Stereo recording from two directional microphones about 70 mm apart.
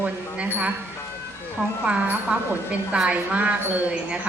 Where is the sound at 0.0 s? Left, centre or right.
Centre.